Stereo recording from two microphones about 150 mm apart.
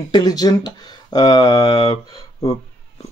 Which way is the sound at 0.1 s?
25° left (ahead or behind).